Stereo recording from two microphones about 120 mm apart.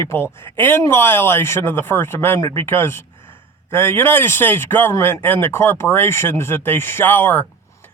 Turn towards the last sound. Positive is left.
turn(degrees=15)  # may be behind; listen again after turning